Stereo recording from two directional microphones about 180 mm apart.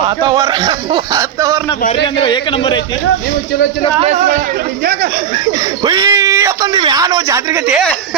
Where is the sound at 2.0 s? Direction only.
30° left (ahead or behind).